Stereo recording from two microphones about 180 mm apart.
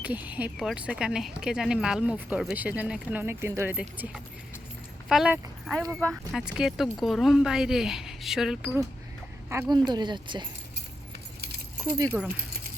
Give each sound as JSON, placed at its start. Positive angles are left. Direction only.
{"t": 0.0, "sound": "speech", "side_deg": -10}
{"t": 9.5, "sound": "speech", "side_deg": -20}
{"t": 11.9, "sound": "speech", "side_deg": -20}